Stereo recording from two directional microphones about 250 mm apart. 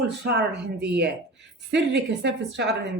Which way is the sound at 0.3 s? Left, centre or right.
Right.